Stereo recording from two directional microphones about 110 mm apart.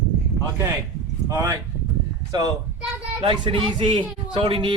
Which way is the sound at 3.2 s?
50° right (ahead or behind).